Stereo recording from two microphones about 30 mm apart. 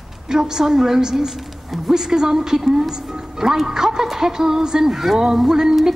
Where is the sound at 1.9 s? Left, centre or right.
Centre.